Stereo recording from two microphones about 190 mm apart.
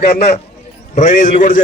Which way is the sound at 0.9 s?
40° left (ahead or behind).